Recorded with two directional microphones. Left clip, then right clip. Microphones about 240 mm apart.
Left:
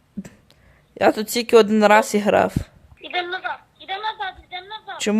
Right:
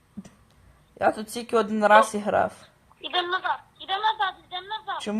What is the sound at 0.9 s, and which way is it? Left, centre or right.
Speech, left.